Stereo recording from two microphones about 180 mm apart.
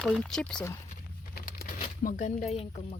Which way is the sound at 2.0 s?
45° left (ahead or behind).